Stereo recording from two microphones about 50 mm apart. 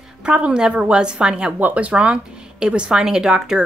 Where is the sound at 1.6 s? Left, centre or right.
Right.